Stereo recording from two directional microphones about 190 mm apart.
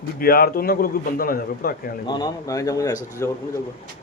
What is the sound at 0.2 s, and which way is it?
A man's voice, 50° left (ahead or behind).